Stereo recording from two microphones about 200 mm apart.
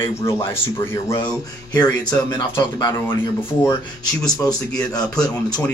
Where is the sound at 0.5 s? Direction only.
15° left (ahead or behind).